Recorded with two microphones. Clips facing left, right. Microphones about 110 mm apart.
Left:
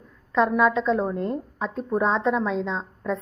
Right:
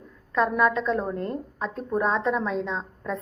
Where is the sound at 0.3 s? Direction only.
5° left (ahead or behind).